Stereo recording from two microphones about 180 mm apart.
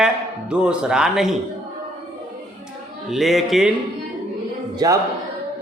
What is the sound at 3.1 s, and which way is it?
Speech, centre (ahead or behind).